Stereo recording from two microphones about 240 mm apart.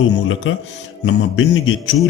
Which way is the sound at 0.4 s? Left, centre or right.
Left.